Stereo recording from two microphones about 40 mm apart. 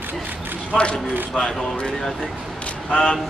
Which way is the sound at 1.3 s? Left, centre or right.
Centre.